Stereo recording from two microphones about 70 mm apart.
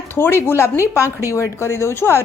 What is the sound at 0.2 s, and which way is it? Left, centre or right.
A woman's voice, left.